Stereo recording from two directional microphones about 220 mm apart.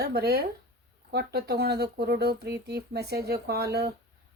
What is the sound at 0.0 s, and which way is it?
Speech, 45° right (ahead or behind).